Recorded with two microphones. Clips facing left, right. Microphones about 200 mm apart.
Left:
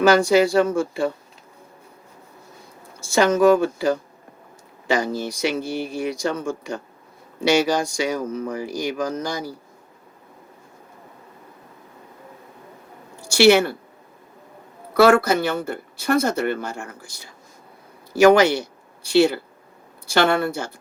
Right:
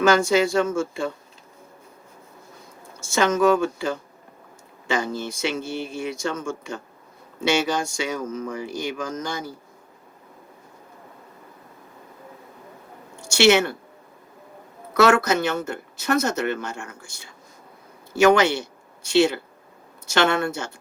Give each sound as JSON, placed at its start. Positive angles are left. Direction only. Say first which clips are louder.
{"t": 0.0, "sound": "speech", "louder": "left 3 dB", "side_deg": 35}
{"t": 3.0, "sound": "speech", "louder": "left 3 dB", "side_deg": 35}
{"t": 13.2, "sound": "speech", "louder": "left 3 dB", "side_deg": 35}
{"t": 14.9, "sound": "speech", "louder": "left 3 dB", "side_deg": 30}
{"t": 18.1, "sound": "speech", "louder": "left 3 dB", "side_deg": 35}